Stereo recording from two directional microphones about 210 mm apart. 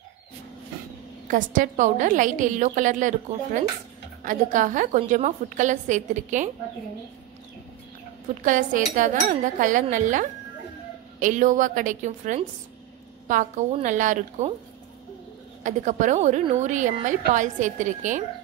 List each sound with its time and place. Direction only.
1.2 s a woman's voice: 40° right (ahead or behind)
8.4 s a woman's voice: 35° right (ahead or behind)
15.6 s a woman's voice: 35° right (ahead or behind)